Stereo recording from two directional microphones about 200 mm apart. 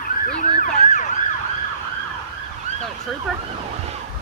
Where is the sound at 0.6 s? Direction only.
40° left (ahead or behind).